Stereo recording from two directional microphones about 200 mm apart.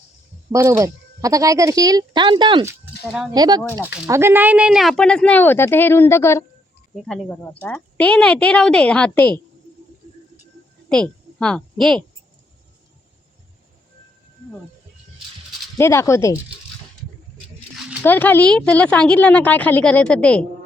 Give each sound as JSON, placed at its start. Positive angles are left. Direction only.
{"t": 0.5, "sound": "speech", "side_deg": -15}
{"t": 2.6, "sound": "speech", "side_deg": -5}
{"t": 3.3, "sound": "speech", "side_deg": -20}
{"t": 3.6, "sound": "a woman's voice", "side_deg": 5}
{"t": 4.0, "sound": "a woman's voice", "side_deg": -15}
{"t": 10.8, "sound": "a woman's voice", "side_deg": 5}
{"t": 15.8, "sound": "a woman's voice", "side_deg": 15}
{"t": 18.0, "sound": "a woman's voice", "side_deg": 10}